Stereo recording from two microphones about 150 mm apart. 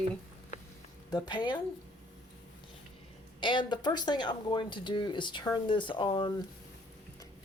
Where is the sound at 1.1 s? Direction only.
30° left (ahead or behind).